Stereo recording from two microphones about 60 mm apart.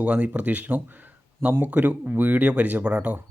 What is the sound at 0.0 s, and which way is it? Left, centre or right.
A man's voice, right.